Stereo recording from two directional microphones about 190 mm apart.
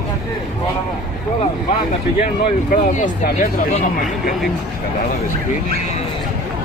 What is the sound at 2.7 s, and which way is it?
Speech, 40° left (ahead or behind).